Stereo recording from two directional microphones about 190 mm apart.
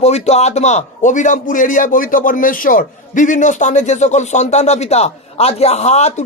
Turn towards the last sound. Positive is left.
turn(degrees=35)  # may be behind; listen again after turning